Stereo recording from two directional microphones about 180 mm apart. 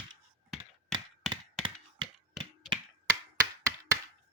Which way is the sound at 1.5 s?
30° right (ahead or behind).